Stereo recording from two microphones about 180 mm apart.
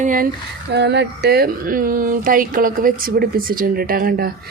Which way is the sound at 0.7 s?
70° right (ahead or behind).